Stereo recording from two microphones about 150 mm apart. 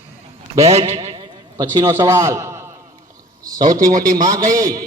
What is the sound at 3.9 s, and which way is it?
Speech, 65° right (ahead or behind).